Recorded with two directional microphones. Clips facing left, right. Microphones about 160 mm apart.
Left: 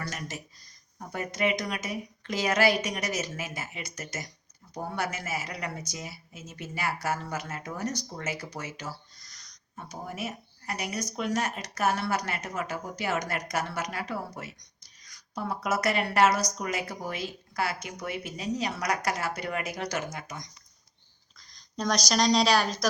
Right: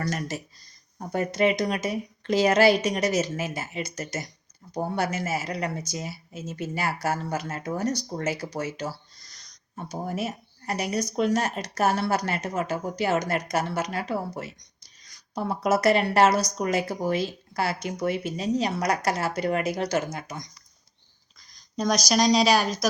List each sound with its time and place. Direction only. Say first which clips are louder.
0.0 s speech: right 7 dB; 40° right (ahead or behind)
21.8 s a woman's voice: right 4 dB; 10° right (ahead or behind)